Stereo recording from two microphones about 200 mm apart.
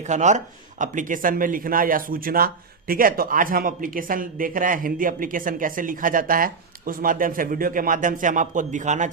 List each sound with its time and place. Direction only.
0.0 s speech: 35° right (ahead or behind)